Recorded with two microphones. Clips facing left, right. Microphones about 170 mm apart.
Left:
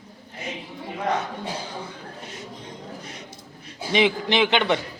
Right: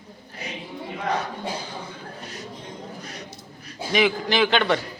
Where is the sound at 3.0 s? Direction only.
25° left (ahead or behind).